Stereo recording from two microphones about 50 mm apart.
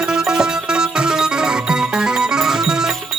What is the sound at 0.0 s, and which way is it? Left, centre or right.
Music, centre.